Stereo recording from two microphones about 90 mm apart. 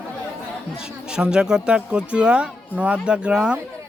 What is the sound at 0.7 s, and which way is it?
Speech, 10° right (ahead or behind).